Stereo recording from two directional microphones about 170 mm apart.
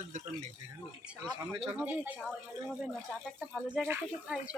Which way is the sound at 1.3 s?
30° right (ahead or behind).